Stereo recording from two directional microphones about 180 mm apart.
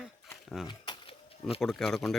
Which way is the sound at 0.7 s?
30° left (ahead or behind).